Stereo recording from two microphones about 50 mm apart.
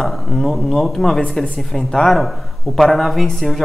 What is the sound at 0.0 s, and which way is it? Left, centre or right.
Speech, centre.